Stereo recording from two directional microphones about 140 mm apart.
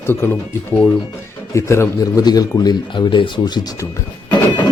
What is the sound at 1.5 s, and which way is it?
A man's voice, 20° left (ahead or behind).